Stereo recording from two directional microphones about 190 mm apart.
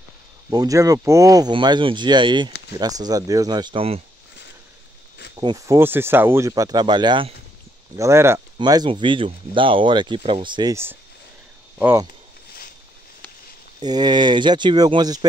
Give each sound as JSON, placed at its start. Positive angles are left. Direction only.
{"t": 0.5, "sound": "speech", "side_deg": -20}
{"t": 5.4, "sound": "speech", "side_deg": -25}
{"t": 5.8, "sound": "speech", "side_deg": -10}
{"t": 7.9, "sound": "speech", "side_deg": -15}
{"t": 13.7, "sound": "speech", "side_deg": -20}